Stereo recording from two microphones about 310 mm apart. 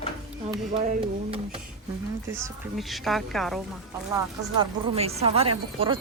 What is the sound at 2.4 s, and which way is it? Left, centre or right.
A woman's voice, centre.